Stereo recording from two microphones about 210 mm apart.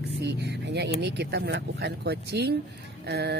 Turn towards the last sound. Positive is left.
turn(degrees=-50)  # may be behind; listen again after turning